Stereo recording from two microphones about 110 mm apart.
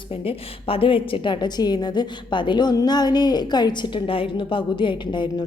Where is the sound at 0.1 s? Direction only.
60° left (ahead or behind).